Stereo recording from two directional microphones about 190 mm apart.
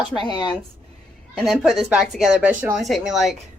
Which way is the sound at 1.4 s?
Centre (ahead or behind).